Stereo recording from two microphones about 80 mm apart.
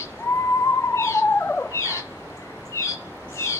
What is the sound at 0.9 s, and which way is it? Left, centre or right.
Bird, left.